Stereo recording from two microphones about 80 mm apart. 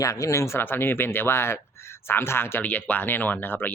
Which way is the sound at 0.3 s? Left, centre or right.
Left.